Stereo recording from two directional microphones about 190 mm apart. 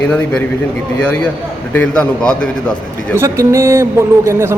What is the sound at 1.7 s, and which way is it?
Speech, 10° left (ahead or behind).